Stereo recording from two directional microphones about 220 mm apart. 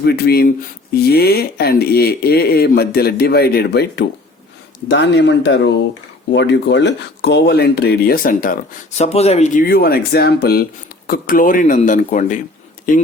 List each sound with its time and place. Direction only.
0.0 s speech: 45° left (ahead or behind)
9.0 s speech: 30° left (ahead or behind)